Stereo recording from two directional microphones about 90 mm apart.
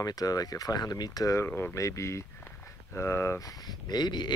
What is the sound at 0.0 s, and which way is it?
Speech, 45° left (ahead or behind).